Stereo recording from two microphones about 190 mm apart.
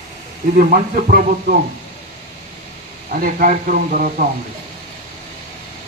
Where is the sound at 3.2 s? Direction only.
45° right (ahead or behind).